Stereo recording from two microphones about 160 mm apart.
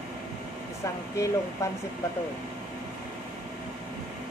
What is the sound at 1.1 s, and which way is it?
Speech, 20° left (ahead or behind).